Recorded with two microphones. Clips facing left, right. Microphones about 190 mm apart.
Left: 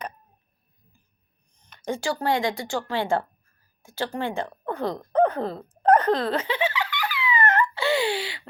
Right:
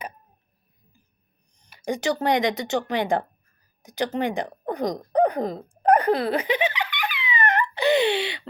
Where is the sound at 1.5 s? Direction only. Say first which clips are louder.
Right 2 dB; 10° right (ahead or behind).